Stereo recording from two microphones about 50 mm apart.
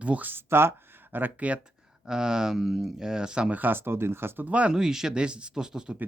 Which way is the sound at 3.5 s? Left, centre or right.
Right.